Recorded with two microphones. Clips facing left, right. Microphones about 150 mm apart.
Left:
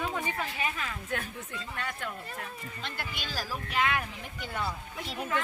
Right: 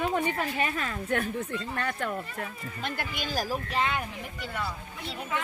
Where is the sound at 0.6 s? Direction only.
50° right (ahead or behind).